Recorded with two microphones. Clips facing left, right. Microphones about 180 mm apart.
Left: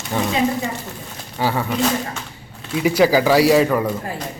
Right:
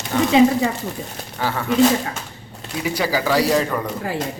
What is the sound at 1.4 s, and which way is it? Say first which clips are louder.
Speech: left 3 dB; 15° left (ahead or behind).